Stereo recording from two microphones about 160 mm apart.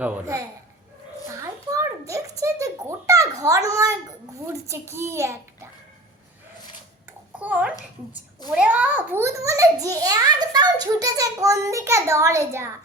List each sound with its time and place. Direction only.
0.0 s a child's voice: 10° right (ahead or behind)
1.3 s a sound: 20° right (ahead or behind)
4.7 s a child's voice: 15° right (ahead or behind)
7.3 s a child's voice: 10° right (ahead or behind)